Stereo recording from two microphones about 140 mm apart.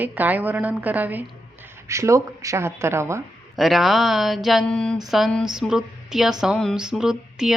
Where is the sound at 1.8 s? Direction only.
20° right (ahead or behind).